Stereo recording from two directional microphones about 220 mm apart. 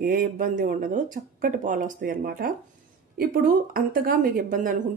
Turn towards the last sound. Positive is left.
turn(degrees=-40)  # may be behind; listen again after turning